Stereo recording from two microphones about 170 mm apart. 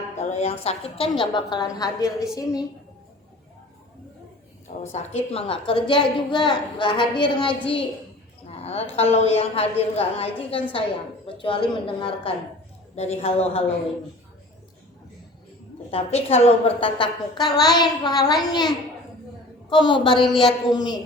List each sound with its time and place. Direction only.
0.2 s a woman's voice: 40° left (ahead or behind); by 2.6 s 20° left (ahead or behind)
4.8 s a woman's voice: 40° left (ahead or behind)
8.4 s a sound: 35° left (ahead or behind)
9.0 s a woman's voice: 40° left (ahead or behind)
15.9 s a woman's voice: 35° left (ahead or behind)
20.2 s speech: centre (ahead or behind)
20.7 s a woman's voice: 25° left (ahead or behind)